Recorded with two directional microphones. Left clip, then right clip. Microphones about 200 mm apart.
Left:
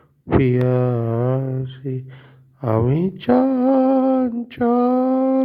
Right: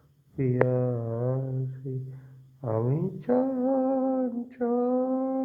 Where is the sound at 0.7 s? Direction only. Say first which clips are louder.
Left 8 dB; 45° left (ahead or behind).